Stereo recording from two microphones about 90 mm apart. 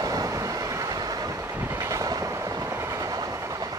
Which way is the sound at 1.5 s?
25° right (ahead or behind).